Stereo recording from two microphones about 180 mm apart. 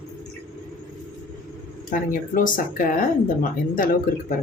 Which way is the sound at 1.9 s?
50° left (ahead or behind).